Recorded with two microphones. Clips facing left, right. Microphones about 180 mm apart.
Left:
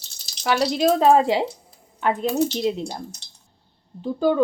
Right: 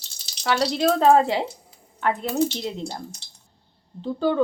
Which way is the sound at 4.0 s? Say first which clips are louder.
Left 2 dB; 10° left (ahead or behind).